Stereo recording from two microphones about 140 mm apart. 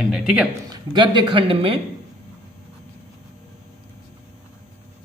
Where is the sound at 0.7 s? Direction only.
35° right (ahead or behind).